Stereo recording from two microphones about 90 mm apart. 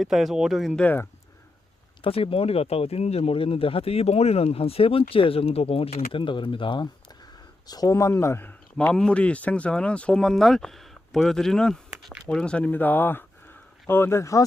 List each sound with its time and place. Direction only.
0.0 s speech: centre (ahead or behind)
2.0 s speech: 90° left; by 6.8 s 65° left (ahead or behind)
7.7 s speech: 40° left (ahead or behind); by 8.9 s 25° left (ahead or behind)
8.9 s speech: 10° left (ahead or behind); by 14.4 s 35° left (ahead or behind)